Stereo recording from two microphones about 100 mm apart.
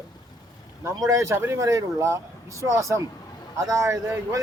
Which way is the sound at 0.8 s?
30° right (ahead or behind).